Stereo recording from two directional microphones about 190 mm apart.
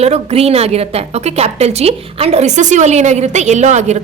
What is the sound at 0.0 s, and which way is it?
A woman's voice, 35° right (ahead or behind).